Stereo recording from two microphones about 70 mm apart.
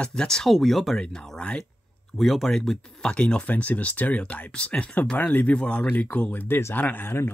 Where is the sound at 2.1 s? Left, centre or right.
Centre.